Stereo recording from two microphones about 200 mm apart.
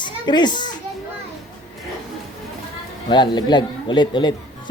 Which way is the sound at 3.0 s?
25° left (ahead or behind).